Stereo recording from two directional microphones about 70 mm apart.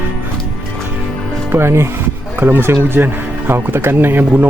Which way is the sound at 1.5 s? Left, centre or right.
Right.